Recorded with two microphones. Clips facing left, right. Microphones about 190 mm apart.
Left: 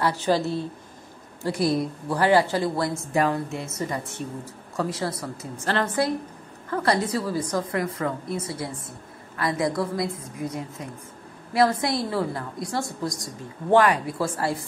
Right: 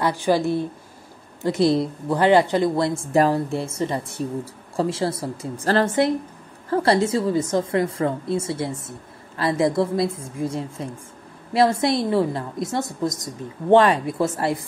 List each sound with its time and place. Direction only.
0.0 s a woman's voice: 15° right (ahead or behind)
3.1 s a woman's voice: 35° right (ahead or behind)